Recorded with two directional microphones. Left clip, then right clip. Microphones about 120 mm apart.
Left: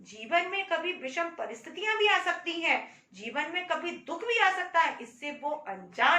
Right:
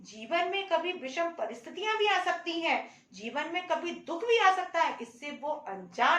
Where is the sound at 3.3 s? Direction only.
45° right (ahead or behind).